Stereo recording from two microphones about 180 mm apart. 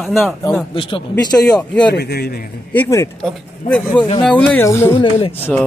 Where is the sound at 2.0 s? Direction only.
60° left (ahead or behind).